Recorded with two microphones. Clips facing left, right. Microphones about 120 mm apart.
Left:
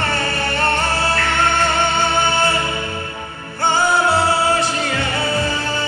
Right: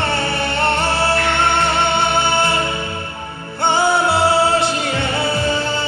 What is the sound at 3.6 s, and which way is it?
Music, 25° right (ahead or behind).